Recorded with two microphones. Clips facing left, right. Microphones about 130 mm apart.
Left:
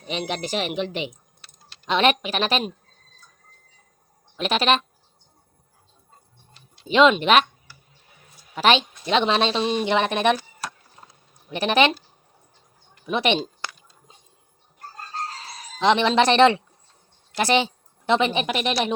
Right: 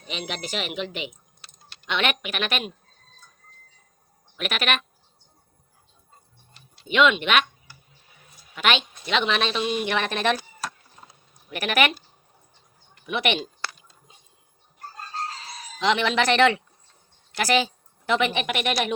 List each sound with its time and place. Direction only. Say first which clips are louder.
0.1 s speech: left 5 dB; 40° left (ahead or behind)
4.4 s speech: left 6 dB; 30° left (ahead or behind)
6.8 s speech: left 4 dB; 30° left (ahead or behind)
8.5 s speech: left 5 dB; 35° left (ahead or behind)
9.9 s speech: left 6 dB; 20° left (ahead or behind)
11.4 s speech: left 4 dB; 25° left (ahead or behind)
13.1 s speech: left 3 dB; 30° left (ahead or behind)
15.8 s a woman's voice: left 4 dB; 30° left (ahead or behind)